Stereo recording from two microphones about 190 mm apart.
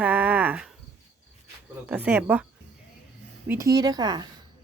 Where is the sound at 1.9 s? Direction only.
10° right (ahead or behind).